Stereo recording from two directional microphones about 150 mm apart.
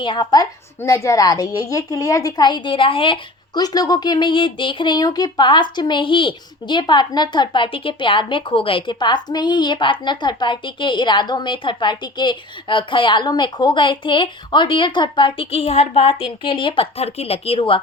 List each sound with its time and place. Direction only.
0.0 s a woman's voice: 30° left (ahead or behind)